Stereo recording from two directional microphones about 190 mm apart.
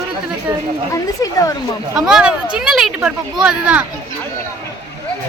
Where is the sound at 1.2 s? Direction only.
15° left (ahead or behind).